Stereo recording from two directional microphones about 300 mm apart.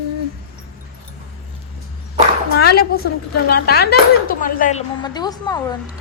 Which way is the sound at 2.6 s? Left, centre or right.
Left.